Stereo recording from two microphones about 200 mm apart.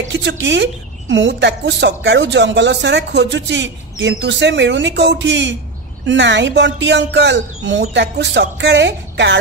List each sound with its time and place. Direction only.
0.1 s a woman's voice: 60° right (ahead or behind)